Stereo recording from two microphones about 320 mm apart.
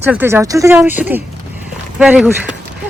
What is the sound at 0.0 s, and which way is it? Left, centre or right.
Speech, centre.